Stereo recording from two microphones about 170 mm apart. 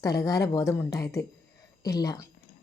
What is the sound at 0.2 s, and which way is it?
A woman's voice, 20° left (ahead or behind).